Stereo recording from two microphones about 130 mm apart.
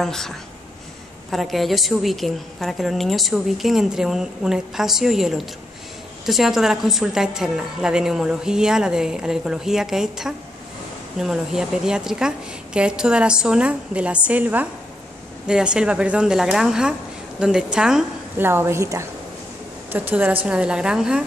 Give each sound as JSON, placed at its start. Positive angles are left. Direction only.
{"t": 0.0, "sound": "a woman's voice", "side_deg": 5}
{"t": 1.3, "sound": "a woman's voice", "side_deg": 0}
{"t": 18.4, "sound": "a woman's voice", "side_deg": -20}